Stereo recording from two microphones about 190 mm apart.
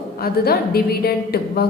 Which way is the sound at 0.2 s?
55° left (ahead or behind).